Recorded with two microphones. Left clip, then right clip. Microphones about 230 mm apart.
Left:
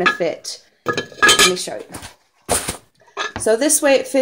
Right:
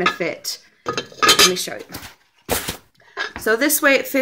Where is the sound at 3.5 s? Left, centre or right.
Centre.